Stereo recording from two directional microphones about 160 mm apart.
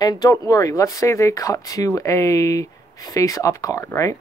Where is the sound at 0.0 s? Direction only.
25° left (ahead or behind).